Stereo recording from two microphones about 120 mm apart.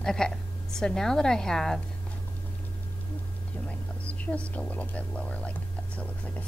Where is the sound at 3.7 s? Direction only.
10° left (ahead or behind).